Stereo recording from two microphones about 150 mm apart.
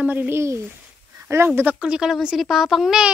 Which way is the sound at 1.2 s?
20° right (ahead or behind).